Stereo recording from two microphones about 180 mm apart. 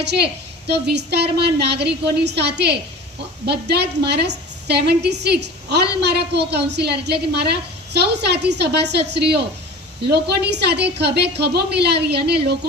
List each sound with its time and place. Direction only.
0.0 s a woman's voice: 65° right (ahead or behind)